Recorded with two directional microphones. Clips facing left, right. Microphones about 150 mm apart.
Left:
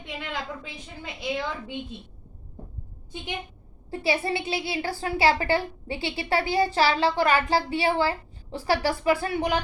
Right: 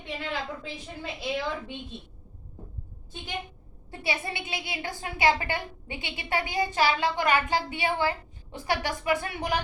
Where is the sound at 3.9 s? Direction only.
30° left (ahead or behind).